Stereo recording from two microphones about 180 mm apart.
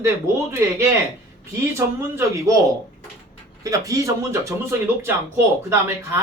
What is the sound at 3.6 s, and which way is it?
Speech, 20° right (ahead or behind).